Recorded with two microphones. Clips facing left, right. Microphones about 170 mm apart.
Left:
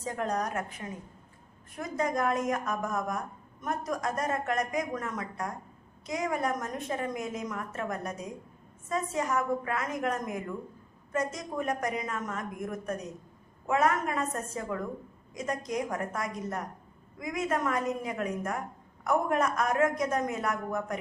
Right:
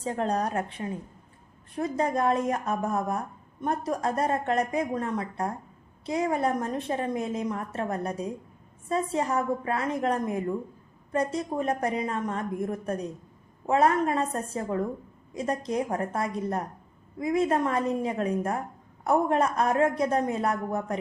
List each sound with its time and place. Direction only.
0.0 s a woman's voice: 30° right (ahead or behind)